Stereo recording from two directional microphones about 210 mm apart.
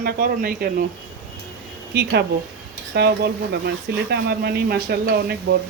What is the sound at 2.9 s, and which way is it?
Speech, 50° right (ahead or behind).